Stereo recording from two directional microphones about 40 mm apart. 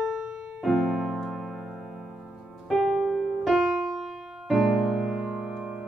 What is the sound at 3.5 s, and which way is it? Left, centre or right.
Music, centre.